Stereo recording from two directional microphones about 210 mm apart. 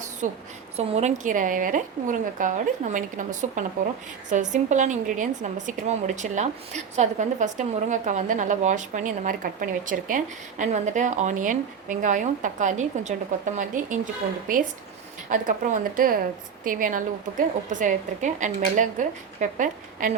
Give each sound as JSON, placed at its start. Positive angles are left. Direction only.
{"t": 0.2, "sound": "a woman's voice", "side_deg": -35}